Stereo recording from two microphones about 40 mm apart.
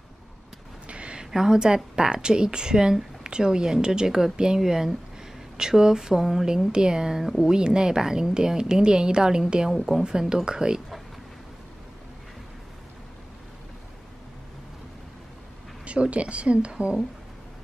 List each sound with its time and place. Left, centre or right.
0.8 s a sound: right
1.3 s a woman's voice: centre
15.8 s speech: right